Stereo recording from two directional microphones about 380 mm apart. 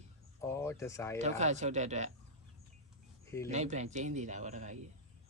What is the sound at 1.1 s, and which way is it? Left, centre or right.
Speech, centre.